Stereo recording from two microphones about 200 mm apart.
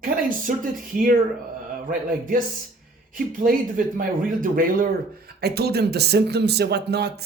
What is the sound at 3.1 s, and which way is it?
Speech, 45° right (ahead or behind).